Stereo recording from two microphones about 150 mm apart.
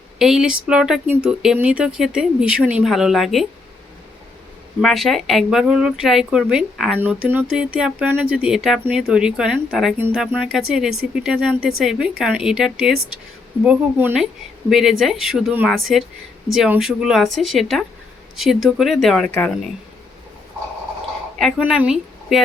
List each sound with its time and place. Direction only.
0.2 s speech: 5° right (ahead or behind)
4.8 s speech: centre (ahead or behind)
7.0 s speech: 15° right (ahead or behind); by 19.7 s 5° left (ahead or behind)
21.6 s speech: 5° right (ahead or behind)